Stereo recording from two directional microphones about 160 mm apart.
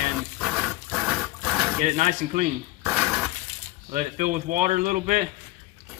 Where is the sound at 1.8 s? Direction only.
50° right (ahead or behind).